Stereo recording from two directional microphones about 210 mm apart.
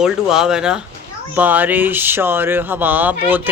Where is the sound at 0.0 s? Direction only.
5° right (ahead or behind).